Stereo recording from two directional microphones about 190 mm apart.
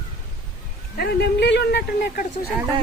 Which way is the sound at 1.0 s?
60° left (ahead or behind).